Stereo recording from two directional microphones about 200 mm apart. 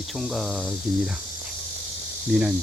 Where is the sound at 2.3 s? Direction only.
5° right (ahead or behind).